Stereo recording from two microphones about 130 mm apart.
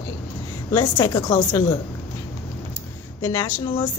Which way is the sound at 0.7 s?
20° left (ahead or behind).